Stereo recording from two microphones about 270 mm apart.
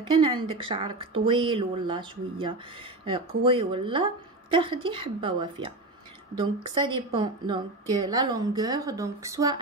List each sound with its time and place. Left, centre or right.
0.1 s a woman's voice: centre